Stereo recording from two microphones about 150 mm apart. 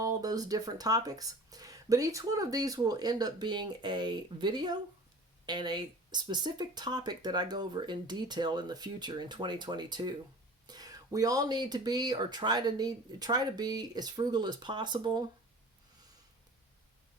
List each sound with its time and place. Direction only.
0.0 s speech: 25° right (ahead or behind)